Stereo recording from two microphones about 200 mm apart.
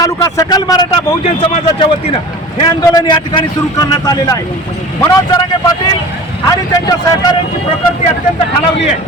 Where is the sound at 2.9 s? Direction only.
20° left (ahead or behind).